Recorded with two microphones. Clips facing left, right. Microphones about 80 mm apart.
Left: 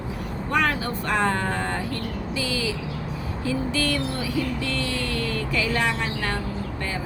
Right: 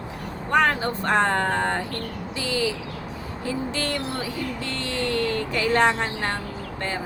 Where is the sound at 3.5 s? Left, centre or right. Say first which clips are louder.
Left 2 dB; right.